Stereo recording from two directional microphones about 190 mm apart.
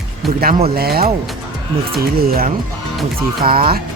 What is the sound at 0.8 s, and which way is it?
Speech, 55° right (ahead or behind).